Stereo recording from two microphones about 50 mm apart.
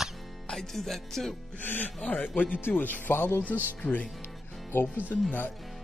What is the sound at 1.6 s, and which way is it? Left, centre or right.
Speech, left.